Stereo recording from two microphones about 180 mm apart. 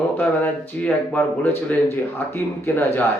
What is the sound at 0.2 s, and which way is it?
Speech, 10° left (ahead or behind).